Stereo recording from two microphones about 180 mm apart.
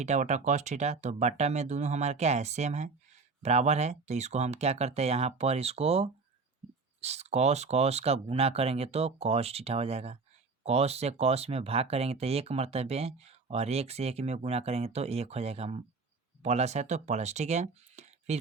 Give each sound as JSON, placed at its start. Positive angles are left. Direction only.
{"t": 0.0, "sound": "speech", "side_deg": -40}